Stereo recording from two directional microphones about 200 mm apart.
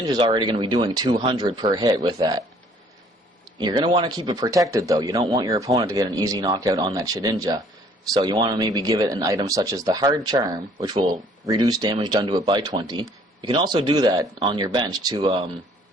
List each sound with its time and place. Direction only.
0.1 s speech: 20° right (ahead or behind)
3.6 s speech: 20° right (ahead or behind)